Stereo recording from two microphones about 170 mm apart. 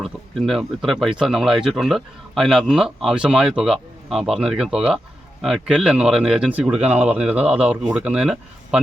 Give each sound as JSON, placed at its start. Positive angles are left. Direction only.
{"t": 0.0, "sound": "speech", "side_deg": 0}